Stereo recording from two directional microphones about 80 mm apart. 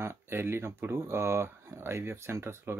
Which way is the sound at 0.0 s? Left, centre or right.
Right.